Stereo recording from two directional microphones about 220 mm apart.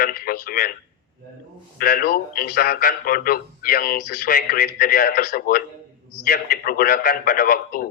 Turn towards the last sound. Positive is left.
turn(degrees=45)  # may be behind; listen again after turning